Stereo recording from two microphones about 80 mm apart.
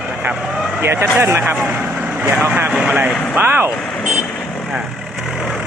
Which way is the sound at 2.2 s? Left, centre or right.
Right.